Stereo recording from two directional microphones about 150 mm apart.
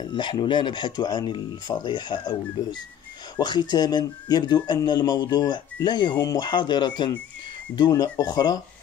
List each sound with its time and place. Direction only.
0.0 s speech: 30° left (ahead or behind)